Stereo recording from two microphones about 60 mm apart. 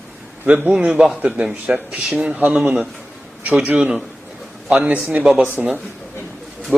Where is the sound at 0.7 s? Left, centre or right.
Centre.